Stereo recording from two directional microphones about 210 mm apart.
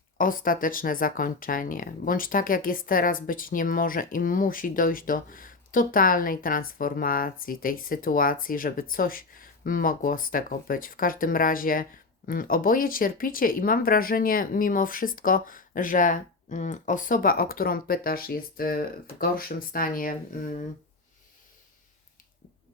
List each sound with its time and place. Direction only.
0.2 s speech: 40° left (ahead or behind)